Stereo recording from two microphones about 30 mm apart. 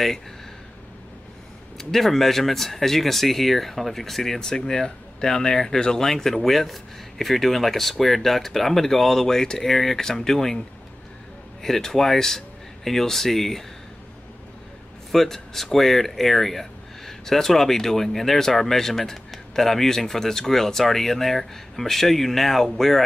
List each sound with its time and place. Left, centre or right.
1.8 s speech: centre
4.4 s speech: centre
11.6 s speech: centre
15.0 s speech: centre